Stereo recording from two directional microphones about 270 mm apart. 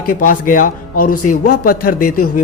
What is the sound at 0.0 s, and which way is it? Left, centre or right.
A man's voice, left.